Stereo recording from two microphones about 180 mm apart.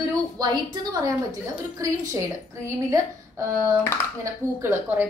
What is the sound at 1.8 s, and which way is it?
A woman's voice, 20° right (ahead or behind).